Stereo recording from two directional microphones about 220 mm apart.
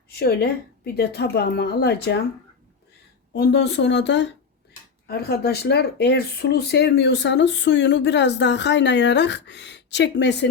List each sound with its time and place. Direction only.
0.1 s a woman's voice: 45° left (ahead or behind)
3.3 s speech: 50° left (ahead or behind)